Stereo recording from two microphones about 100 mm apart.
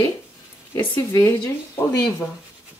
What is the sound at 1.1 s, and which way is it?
Speech, 30° left (ahead or behind).